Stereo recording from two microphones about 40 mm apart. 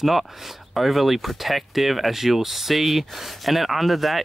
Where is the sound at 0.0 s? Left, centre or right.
Centre.